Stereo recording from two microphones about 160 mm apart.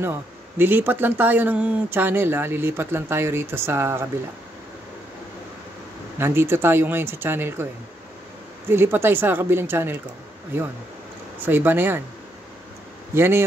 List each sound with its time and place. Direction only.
0.0 s speech: 15° right (ahead or behind)
6.1 s speech: 15° right (ahead or behind)
8.6 s speech: 15° right (ahead or behind)
11.4 s speech: 15° right (ahead or behind)
13.1 s speech: 15° right (ahead or behind)